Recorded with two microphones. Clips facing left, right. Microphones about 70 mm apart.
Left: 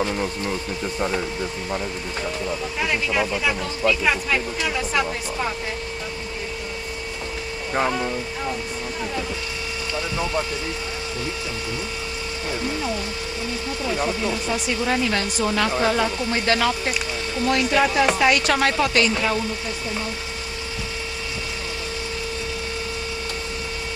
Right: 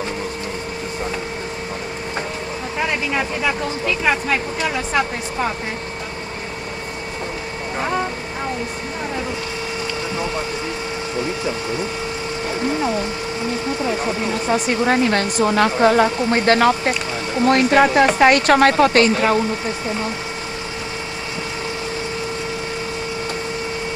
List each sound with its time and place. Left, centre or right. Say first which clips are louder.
4.0 s speech: right 3 dB; centre
14.5 s speech: right 8 dB; right